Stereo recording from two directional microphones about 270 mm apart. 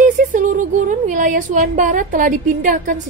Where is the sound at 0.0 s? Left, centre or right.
Right.